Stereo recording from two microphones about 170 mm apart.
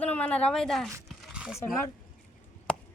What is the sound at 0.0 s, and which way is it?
Speech, 10° left (ahead or behind).